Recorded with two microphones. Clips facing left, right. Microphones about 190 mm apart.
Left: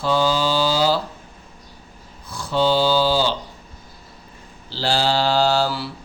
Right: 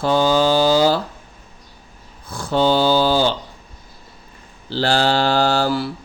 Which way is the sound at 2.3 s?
50° right (ahead or behind).